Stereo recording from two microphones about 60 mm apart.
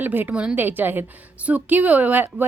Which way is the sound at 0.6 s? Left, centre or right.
Right.